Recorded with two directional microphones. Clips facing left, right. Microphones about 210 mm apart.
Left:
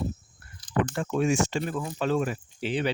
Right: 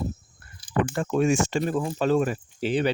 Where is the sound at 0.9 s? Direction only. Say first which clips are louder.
Right 5 dB; 45° right (ahead or behind).